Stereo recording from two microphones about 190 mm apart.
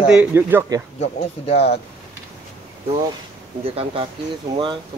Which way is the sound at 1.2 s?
35° left (ahead or behind).